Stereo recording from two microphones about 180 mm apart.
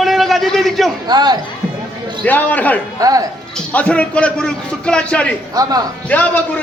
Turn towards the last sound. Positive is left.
turn(degrees=10)  # may be behind; listen again after turning